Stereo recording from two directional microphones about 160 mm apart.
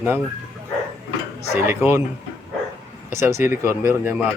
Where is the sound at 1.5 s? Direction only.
15° right (ahead or behind).